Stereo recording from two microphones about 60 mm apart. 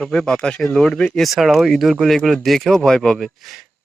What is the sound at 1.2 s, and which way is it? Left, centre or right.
Speech, centre.